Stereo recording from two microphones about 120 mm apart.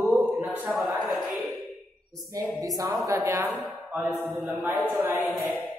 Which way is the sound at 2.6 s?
30° right (ahead or behind).